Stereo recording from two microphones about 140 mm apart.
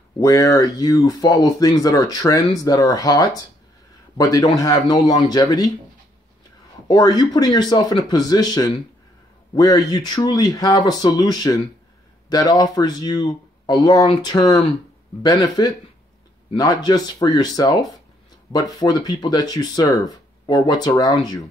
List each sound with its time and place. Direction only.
0.2 s speech: 25° left (ahead or behind)
6.9 s speech: 30° left (ahead or behind)